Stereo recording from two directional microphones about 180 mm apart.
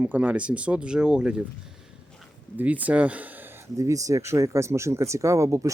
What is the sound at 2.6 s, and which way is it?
Speech, 10° right (ahead or behind).